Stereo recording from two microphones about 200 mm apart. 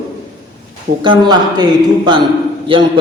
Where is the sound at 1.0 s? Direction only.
25° right (ahead or behind).